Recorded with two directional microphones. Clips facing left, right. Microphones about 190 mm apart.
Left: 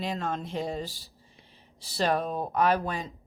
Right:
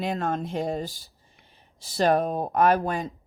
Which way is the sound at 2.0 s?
45° right (ahead or behind).